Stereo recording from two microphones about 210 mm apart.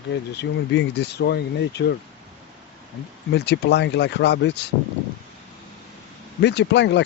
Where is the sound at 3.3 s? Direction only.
55° left (ahead or behind).